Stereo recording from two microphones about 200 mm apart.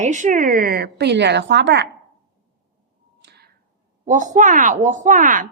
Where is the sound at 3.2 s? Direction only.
55° right (ahead or behind).